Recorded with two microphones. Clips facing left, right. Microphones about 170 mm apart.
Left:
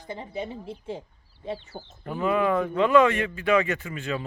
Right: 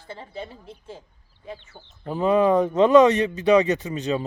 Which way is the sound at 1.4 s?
35° left (ahead or behind).